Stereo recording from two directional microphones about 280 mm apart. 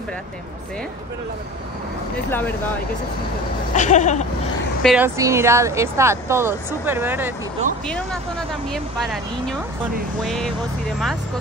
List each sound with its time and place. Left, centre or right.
3.7 s a sound: left
4.8 s speech: centre
7.8 s speech: centre